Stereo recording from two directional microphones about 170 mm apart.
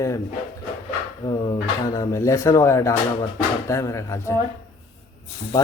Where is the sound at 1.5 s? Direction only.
20° left (ahead or behind).